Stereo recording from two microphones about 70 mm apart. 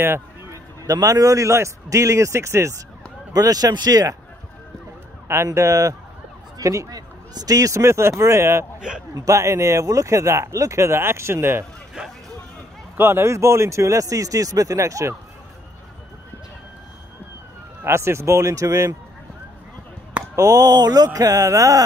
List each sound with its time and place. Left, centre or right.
0.0 s a sound: right
0.8 s speech: right
3.3 s speech: right
5.3 s speech: right
9.1 s speech: right
12.9 s speech: right
17.8 s speech: right
20.3 s speech: right